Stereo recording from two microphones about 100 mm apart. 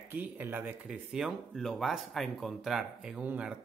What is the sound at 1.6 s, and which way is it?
Speech, centre (ahead or behind).